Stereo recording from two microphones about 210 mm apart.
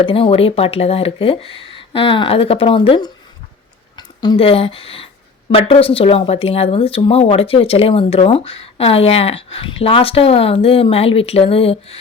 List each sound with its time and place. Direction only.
0.0 s speech: 25° left (ahead or behind)